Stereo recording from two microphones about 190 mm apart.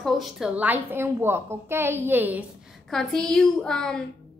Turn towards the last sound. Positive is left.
turn(degrees=5)  # may be behind; listen again after turning